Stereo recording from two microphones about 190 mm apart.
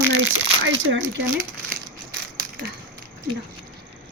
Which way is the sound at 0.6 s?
90° right.